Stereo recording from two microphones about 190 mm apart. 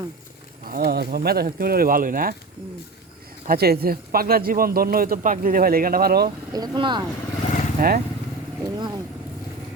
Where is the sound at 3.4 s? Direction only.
55° right (ahead or behind).